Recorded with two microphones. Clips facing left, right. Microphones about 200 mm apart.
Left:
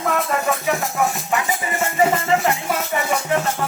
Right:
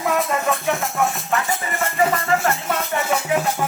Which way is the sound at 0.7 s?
Centre (ahead or behind).